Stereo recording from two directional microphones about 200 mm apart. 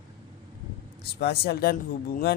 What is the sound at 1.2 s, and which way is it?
Speech, 50° left (ahead or behind).